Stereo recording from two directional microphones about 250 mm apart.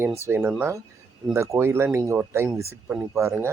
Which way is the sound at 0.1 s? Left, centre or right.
Centre.